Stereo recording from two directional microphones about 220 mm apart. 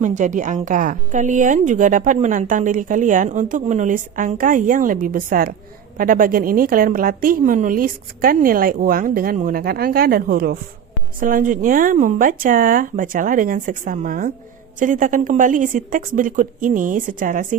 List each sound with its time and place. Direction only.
0.0 s a woman's voice: 35° right (ahead or behind)